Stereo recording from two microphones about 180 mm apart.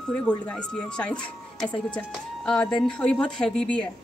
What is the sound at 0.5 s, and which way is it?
Speech, 5° left (ahead or behind).